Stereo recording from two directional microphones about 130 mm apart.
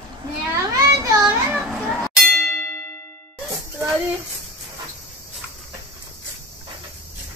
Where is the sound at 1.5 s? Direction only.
5° right (ahead or behind).